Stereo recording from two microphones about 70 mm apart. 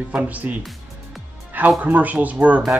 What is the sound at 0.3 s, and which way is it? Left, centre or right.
Speech, right.